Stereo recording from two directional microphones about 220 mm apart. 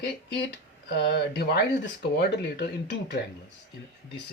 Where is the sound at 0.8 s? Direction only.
50° left (ahead or behind).